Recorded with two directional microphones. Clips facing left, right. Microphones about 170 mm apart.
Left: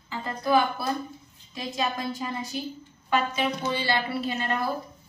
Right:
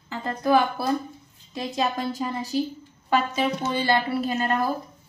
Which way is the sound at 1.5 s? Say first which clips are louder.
Right 3 dB; 35° right (ahead or behind).